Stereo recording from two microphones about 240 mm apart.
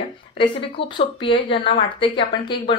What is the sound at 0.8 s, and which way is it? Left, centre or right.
Speech, left.